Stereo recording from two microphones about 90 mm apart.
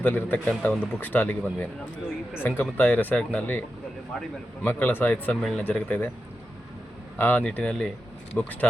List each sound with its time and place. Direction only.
0.0 s speech: 20° left (ahead or behind)
4.1 s speech: 5° left (ahead or behind)
4.6 s speech: 20° left (ahead or behind)
5.4 s speech: 5° left (ahead or behind)
5.6 s speech: 15° left (ahead or behind)
7.2 s speech: 20° left (ahead or behind)